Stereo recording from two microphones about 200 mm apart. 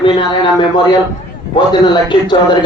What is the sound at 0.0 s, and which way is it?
A man's voice, 25° left (ahead or behind).